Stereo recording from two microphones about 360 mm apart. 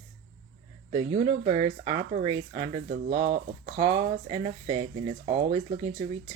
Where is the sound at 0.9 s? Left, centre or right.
Centre.